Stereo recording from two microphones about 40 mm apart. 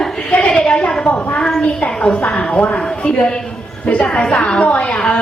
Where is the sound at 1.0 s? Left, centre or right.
Left.